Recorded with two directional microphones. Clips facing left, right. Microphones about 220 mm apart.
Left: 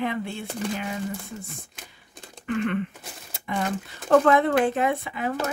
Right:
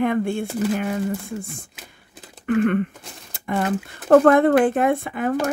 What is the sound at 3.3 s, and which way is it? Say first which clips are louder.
Speech: right 5 dB; 50° right (ahead or behind).